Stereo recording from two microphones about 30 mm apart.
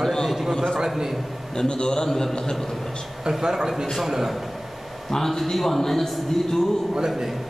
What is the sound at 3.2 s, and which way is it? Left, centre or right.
A man's voice, centre.